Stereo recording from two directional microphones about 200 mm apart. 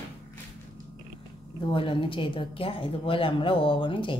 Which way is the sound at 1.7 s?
25° left (ahead or behind).